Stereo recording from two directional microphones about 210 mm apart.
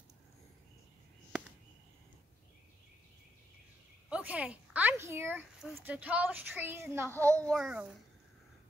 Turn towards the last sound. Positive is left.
turn(degrees=-5)  # may be behind; listen again after turning